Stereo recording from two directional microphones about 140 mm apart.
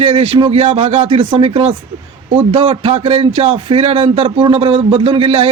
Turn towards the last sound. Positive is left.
turn(degrees=-45)  # may be behind; listen again after turning